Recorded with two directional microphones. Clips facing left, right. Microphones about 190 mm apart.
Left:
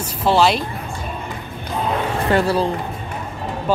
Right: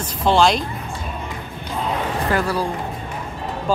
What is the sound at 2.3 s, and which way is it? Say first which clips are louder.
Speech: left 5 dB; 25° left (ahead or behind).